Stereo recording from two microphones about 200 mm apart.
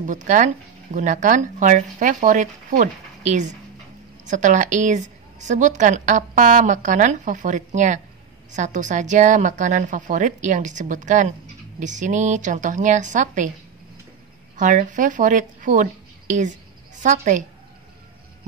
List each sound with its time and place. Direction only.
0.0 s a woman's voice: 40° right (ahead or behind)
14.6 s a woman's voice: 40° right (ahead or behind)